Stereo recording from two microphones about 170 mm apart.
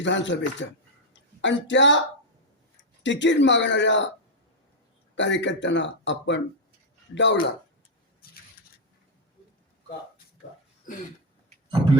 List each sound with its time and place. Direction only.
0.0 s speech: 90° left
3.0 s speech: 90° left
5.1 s speech: 90° left